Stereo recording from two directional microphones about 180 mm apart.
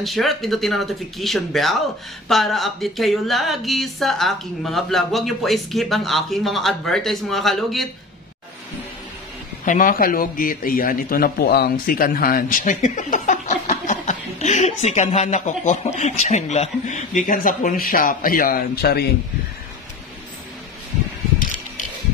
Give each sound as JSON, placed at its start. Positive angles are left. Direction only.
{"t": 0.0, "sound": "speech", "side_deg": 0}
{"t": 9.7, "sound": "a man's voice", "side_deg": 50}